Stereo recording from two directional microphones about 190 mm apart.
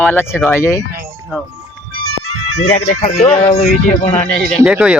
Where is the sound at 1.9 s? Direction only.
90° right.